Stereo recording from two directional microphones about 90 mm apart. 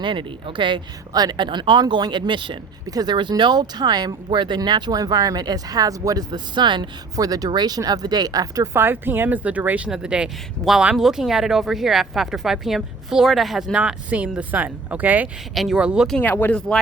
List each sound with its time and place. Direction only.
0.0 s speech: 65° right (ahead or behind)
2.8 s speech: 45° right (ahead or behind)
7.2 s speech: 45° right (ahead or behind); by 15.3 s 20° right (ahead or behind)
15.5 s speech: 5° right (ahead or behind)
16.2 s speech: 20° left (ahead or behind)
16.6 s speech: 10° left (ahead or behind)